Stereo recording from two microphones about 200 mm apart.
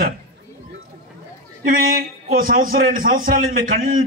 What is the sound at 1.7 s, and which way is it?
A man's voice, 45° right (ahead or behind).